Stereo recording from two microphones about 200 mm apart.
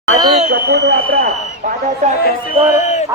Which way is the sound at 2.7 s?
35° left (ahead or behind).